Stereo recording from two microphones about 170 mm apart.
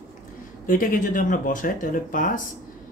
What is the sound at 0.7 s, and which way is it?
Speech, 55° left (ahead or behind).